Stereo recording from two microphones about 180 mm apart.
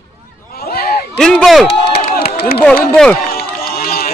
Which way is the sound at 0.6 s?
55° left (ahead or behind).